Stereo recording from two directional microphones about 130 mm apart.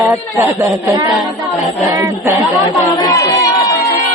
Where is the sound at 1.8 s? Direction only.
25° right (ahead or behind).